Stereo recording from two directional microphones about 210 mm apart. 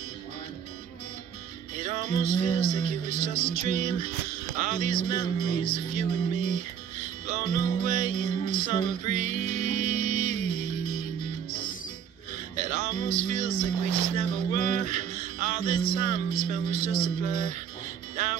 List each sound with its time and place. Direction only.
1.8 s music: 35° right (ahead or behind)
12.5 s music: 35° right (ahead or behind)